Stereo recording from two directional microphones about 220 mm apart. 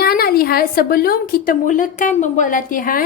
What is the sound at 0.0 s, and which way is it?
A woman's voice, 45° left (ahead or behind).